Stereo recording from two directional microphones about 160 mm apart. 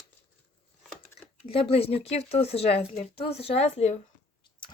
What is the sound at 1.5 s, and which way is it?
Speech, 35° left (ahead or behind).